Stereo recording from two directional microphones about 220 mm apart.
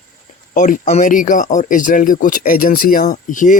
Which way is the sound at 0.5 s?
35° left (ahead or behind).